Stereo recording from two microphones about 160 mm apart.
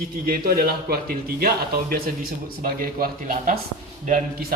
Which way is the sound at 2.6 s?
65° right (ahead or behind).